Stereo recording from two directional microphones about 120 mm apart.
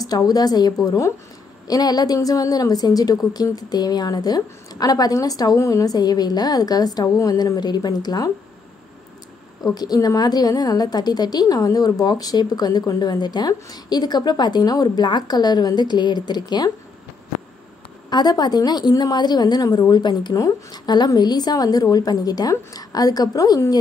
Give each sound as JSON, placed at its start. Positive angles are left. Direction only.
{"t": 0.0, "sound": "a woman's voice", "side_deg": 30}
{"t": 9.6, "sound": "a woman's voice", "side_deg": 35}
{"t": 18.1, "sound": "a woman's voice", "side_deg": 35}